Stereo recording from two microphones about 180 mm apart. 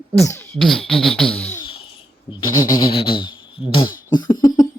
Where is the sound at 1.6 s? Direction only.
30° left (ahead or behind).